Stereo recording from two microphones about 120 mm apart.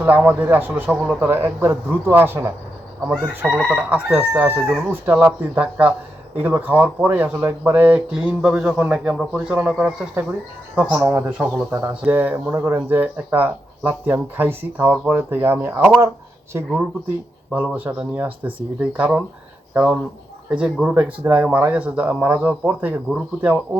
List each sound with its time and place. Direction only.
0.0 s speech: 15° right (ahead or behind)
10.8 s speech: 25° right (ahead or behind)
11.3 s speech: 15° right (ahead or behind)
17.5 s speech: 15° right (ahead or behind)